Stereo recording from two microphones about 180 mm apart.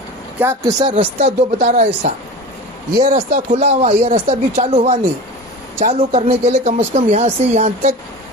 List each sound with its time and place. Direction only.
0.4 s speech: 10° right (ahead or behind)
0.8 s speech: 25° right (ahead or behind)
1.2 s speech: 40° right (ahead or behind)